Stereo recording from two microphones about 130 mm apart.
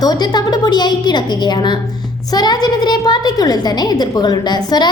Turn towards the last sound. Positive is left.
turn(degrees=30)  # may be behind; listen again after turning